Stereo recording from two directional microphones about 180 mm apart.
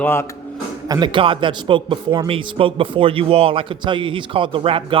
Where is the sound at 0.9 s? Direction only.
25° right (ahead or behind).